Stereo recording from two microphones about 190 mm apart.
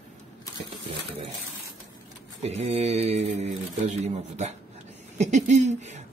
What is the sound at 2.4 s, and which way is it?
Speech, 35° right (ahead or behind).